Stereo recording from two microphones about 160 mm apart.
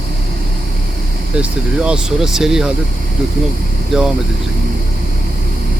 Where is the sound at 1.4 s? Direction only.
5° right (ahead or behind).